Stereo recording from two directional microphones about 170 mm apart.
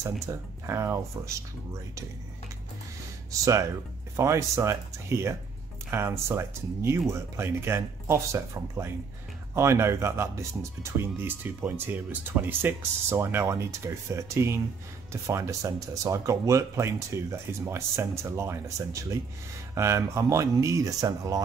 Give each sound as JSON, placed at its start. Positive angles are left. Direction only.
{"t": 0.0, "sound": "speech", "side_deg": -15}
{"t": 3.3, "sound": "speech", "side_deg": -20}